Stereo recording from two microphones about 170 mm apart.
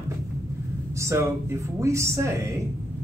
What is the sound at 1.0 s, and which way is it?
Speech, 15° right (ahead or behind).